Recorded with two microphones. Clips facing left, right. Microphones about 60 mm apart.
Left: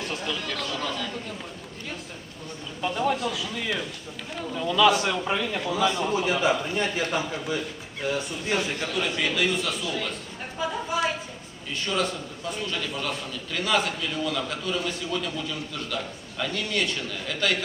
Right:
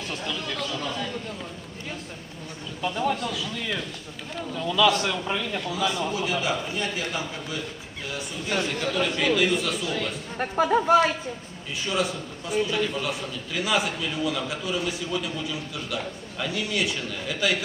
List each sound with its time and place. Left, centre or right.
0.0 s a man's voice: centre
2.8 s a man's voice: centre
5.7 s a man's voice: left
8.4 s a man's voice: centre
9.0 s a man's voice: centre
10.3 s speech: right
11.9 s a man's voice: centre